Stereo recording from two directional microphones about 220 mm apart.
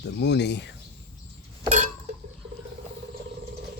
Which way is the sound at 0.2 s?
50° left (ahead or behind).